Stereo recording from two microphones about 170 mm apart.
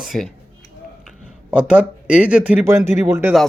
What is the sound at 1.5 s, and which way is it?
Speech, 5° right (ahead or behind).